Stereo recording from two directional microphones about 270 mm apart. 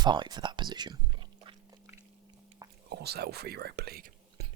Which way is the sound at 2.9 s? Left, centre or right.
Right.